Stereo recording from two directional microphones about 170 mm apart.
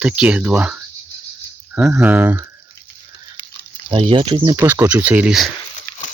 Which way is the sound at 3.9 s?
30° right (ahead or behind).